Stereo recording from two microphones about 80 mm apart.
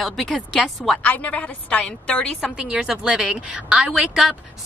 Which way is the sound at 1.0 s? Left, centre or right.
Centre.